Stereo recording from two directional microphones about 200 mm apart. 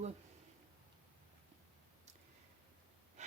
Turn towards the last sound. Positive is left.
turn(degrees=-35)  # may be behind; listen again after turning